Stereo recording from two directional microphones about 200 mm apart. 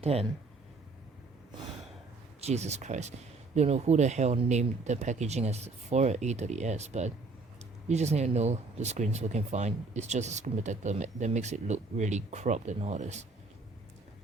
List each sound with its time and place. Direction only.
0.0 s speech: 30° right (ahead or behind)
2.4 s speech: 35° right (ahead or behind)